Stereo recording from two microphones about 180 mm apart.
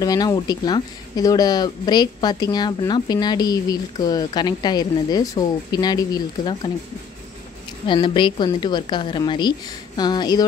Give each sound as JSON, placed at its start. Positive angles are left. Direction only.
{"t": 0.0, "sound": "speech", "side_deg": 20}
{"t": 7.8, "sound": "speech", "side_deg": 25}